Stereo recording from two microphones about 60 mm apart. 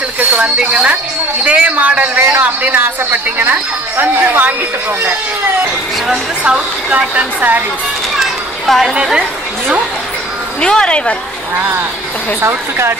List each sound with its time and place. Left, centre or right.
0.2 s a man's voice: right
6.4 s a man's voice: centre
8.2 s children playing: centre
8.9 s speech: centre
10.6 s speech: centre
11.5 s a woman's voice: right